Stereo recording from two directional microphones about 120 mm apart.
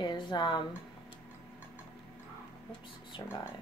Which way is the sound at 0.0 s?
40° left (ahead or behind).